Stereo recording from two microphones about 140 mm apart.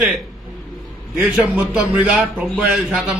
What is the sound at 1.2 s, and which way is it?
A man's voice, 5° right (ahead or behind).